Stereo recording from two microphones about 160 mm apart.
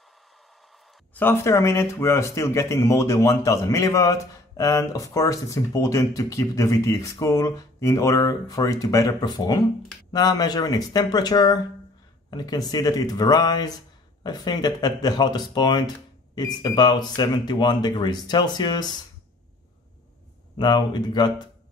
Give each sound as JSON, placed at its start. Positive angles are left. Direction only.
{"t": 1.1, "sound": "speech", "side_deg": 15}
{"t": 20.5, "sound": "speech", "side_deg": 25}